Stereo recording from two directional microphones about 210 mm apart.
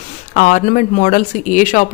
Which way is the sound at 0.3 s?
35° left (ahead or behind).